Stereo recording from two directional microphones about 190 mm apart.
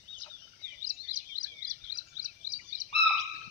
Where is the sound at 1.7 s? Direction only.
45° right (ahead or behind).